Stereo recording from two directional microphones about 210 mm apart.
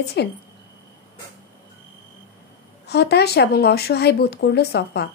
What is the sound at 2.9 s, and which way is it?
Speech, 50° left (ahead or behind).